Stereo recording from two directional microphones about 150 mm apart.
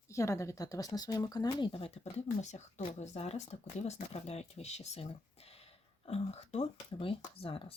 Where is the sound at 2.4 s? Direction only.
50° left (ahead or behind).